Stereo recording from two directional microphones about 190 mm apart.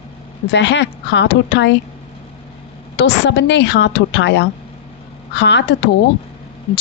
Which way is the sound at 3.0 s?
65° left (ahead or behind).